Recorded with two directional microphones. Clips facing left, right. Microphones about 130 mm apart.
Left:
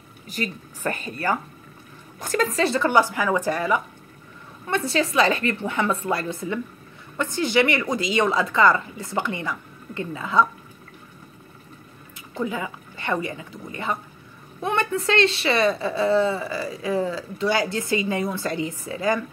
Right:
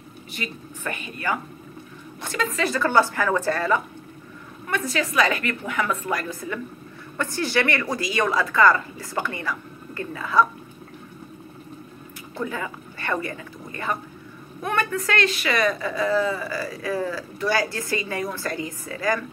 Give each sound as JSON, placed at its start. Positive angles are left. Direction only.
{"t": 0.3, "sound": "speech", "side_deg": 40}
{"t": 2.9, "sound": "speech", "side_deg": 15}
{"t": 4.6, "sound": "a woman's voice", "side_deg": 30}
{"t": 12.4, "sound": "a woman's voice", "side_deg": 20}